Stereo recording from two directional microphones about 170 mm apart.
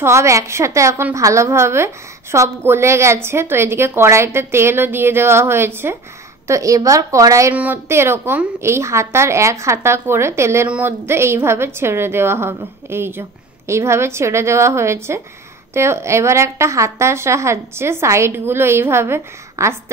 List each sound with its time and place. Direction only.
0.0 s a woman's voice: 15° right (ahead or behind)